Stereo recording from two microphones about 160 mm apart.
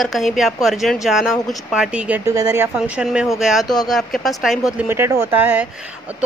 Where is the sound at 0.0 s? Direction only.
Centre (ahead or behind).